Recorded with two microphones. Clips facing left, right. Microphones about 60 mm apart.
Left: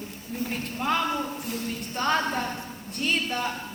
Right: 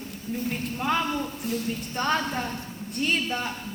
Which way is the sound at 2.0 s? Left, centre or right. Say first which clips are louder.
Left 1 dB; centre.